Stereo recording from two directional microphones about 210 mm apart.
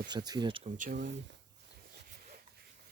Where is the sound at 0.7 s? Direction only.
40° right (ahead or behind).